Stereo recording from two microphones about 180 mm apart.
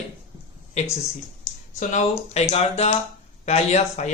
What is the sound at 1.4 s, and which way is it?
Speech, 45° left (ahead or behind).